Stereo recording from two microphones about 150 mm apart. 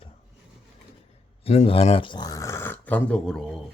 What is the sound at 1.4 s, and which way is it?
Speech, 45° left (ahead or behind).